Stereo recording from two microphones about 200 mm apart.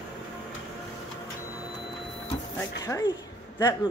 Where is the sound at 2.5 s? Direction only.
15° left (ahead or behind).